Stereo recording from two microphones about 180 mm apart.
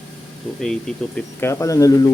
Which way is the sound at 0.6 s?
5° left (ahead or behind).